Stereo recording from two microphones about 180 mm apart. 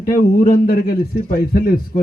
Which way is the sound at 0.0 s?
50° left (ahead or behind).